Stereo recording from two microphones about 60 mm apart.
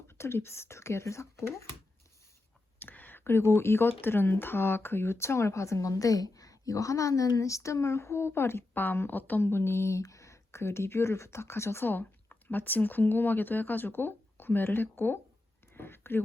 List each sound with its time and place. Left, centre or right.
0.1 s speech: left
2.7 s speech: left
9.4 s speech: left
10.0 s speech: left
11.9 s speech: left
15.7 s a sound: left